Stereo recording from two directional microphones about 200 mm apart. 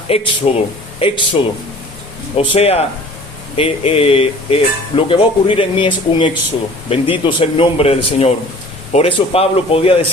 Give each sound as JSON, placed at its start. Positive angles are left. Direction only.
{"t": 0.1, "sound": "speech", "side_deg": 30}
{"t": 2.4, "sound": "speech", "side_deg": 30}